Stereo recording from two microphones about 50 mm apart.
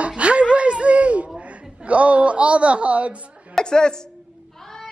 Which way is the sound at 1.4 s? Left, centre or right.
Right.